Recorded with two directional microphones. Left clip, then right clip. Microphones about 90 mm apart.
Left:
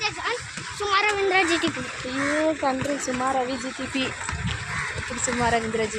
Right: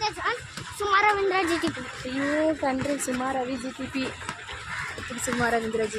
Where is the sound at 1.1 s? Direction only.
Centre (ahead or behind).